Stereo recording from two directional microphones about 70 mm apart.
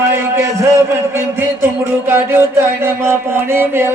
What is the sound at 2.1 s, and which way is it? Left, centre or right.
A man's voice, right.